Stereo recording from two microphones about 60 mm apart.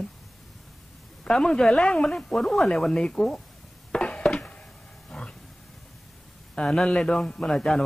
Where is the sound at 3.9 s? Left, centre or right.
Centre.